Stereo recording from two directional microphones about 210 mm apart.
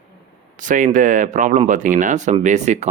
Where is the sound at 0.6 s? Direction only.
40° right (ahead or behind).